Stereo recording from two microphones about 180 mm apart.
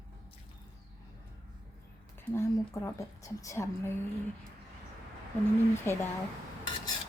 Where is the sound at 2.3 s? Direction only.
15° left (ahead or behind).